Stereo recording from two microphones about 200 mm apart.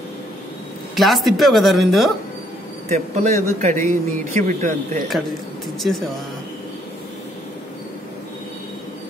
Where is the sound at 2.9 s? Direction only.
35° right (ahead or behind).